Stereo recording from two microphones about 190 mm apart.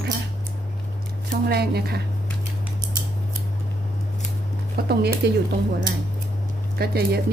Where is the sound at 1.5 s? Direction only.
55° right (ahead or behind).